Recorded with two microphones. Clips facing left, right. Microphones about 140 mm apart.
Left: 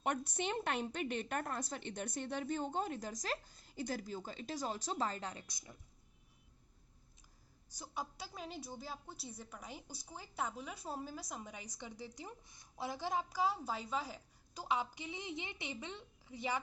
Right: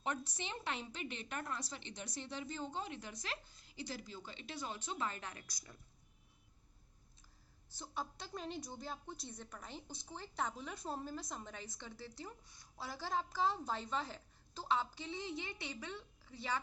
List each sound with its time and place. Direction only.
0.0 s a woman's voice: 60° left (ahead or behind); by 5.7 s 25° left (ahead or behind)
7.8 s a woman's voice: 10° left (ahead or behind)